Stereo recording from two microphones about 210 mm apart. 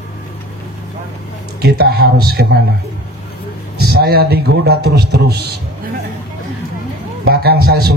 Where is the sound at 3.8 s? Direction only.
50° right (ahead or behind).